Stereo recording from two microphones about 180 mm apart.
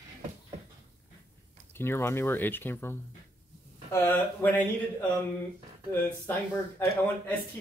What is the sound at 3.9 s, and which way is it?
Speech, 10° left (ahead or behind).